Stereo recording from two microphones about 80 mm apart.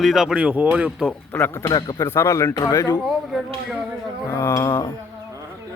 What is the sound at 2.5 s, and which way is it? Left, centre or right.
Speech, left.